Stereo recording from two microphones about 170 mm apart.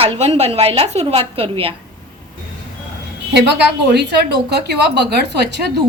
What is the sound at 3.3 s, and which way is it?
A woman's voice, 85° right.